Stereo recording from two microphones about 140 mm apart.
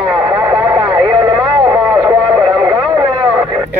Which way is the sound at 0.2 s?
20° right (ahead or behind).